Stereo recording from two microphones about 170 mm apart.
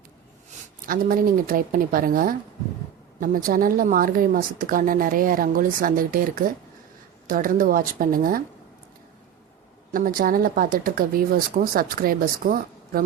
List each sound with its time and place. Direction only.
0.9 s speech: 55° right (ahead or behind)
9.9 s speech: 55° right (ahead or behind)